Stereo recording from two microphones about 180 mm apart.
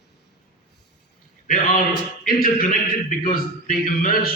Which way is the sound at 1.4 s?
50° left (ahead or behind).